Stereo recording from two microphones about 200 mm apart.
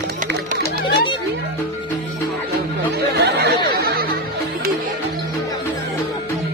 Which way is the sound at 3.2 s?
55° right (ahead or behind).